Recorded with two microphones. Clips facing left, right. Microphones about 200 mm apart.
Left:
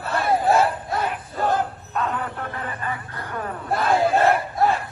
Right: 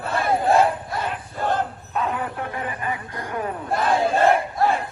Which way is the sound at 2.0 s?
10° right (ahead or behind).